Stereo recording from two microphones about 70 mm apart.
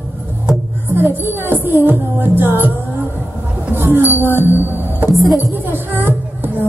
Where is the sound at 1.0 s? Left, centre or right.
Right.